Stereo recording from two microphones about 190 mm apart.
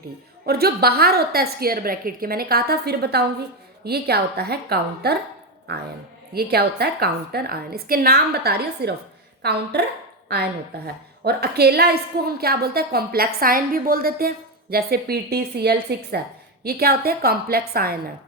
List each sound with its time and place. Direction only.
0.4 s a woman's voice: 55° right (ahead or behind)